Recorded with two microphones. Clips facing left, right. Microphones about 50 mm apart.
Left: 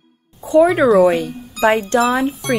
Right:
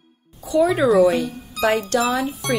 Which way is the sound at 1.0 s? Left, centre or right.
Left.